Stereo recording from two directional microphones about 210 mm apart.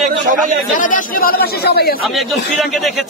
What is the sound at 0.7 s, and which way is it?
Speech, 40° left (ahead or behind).